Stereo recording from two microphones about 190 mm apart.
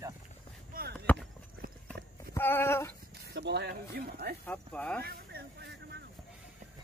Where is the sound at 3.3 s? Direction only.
60° right (ahead or behind).